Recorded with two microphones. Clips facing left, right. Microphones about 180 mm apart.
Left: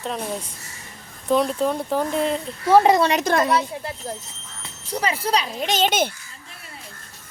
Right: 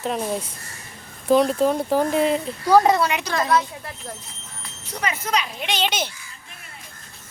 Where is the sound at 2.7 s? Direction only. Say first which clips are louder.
Left 1 dB; 30° left (ahead or behind).